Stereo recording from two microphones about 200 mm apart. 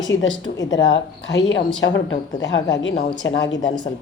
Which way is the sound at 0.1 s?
75° left (ahead or behind).